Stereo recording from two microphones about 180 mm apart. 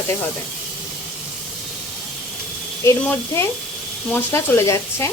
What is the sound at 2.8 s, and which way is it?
Speech, 15° left (ahead or behind).